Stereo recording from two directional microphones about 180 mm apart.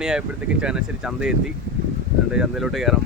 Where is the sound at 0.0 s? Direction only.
5° right (ahead or behind).